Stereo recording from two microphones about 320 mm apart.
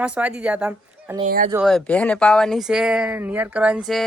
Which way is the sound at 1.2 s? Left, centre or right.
Right.